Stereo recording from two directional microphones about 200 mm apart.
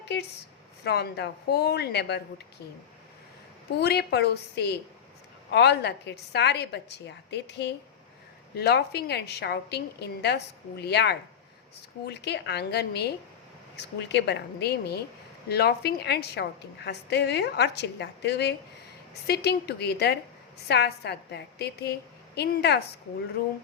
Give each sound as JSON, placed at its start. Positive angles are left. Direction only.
{"t": 0.0, "sound": "a woman's voice", "side_deg": 55}
{"t": 3.8, "sound": "a woman's voice", "side_deg": 55}